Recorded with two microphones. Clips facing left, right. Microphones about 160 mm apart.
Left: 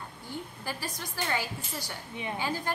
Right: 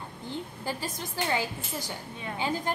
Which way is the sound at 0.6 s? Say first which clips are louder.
Right 3 dB; 20° right (ahead or behind).